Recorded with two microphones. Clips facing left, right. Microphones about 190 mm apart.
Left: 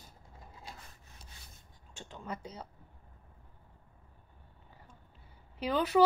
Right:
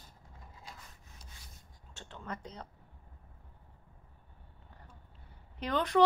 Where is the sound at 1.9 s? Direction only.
10° left (ahead or behind).